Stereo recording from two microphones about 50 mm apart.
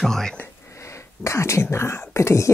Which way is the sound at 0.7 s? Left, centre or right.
Left.